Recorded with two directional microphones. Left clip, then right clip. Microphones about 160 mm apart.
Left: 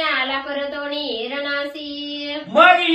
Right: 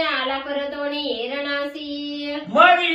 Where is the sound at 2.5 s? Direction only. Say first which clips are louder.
Left 2 dB; 10° left (ahead or behind).